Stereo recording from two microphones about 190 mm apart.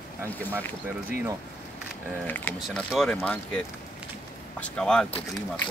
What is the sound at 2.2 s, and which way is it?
Speech, 10° left (ahead or behind).